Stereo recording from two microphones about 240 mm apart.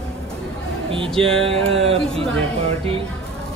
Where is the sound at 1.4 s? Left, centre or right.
Right.